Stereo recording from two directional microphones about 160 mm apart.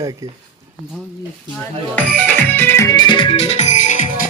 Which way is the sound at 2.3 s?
10° left (ahead or behind).